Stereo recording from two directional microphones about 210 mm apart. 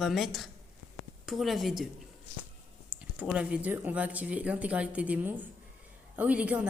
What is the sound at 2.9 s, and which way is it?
A woman's voice, 5° right (ahead or behind).